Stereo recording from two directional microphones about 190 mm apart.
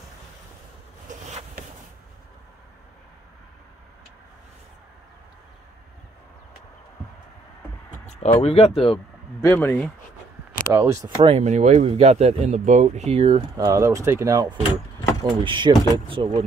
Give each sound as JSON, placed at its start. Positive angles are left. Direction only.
{"t": 8.1, "sound": "speech", "side_deg": 35}
{"t": 9.4, "sound": "speech", "side_deg": 10}
{"t": 10.7, "sound": "speech", "side_deg": -15}
{"t": 11.0, "sound": "speech", "side_deg": -35}
{"t": 13.7, "sound": "speech", "side_deg": -15}